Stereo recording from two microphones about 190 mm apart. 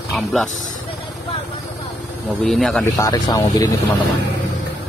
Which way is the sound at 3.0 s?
20° left (ahead or behind).